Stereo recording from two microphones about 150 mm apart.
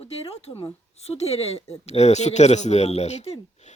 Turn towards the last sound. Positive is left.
turn(degrees=45)  # may be behind; listen again after turning